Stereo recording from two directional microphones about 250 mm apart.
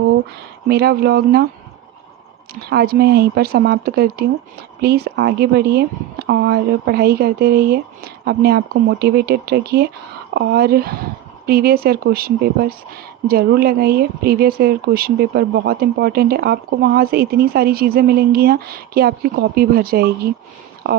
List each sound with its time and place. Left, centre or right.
0.7 s speech: right
2.6 s speech: right